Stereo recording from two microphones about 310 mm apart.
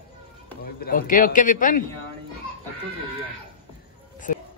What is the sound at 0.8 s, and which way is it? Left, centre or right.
A man's voice, left.